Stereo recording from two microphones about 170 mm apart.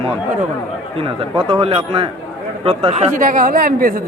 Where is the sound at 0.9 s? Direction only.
30° right (ahead or behind); by 4.0 s 55° right (ahead or behind).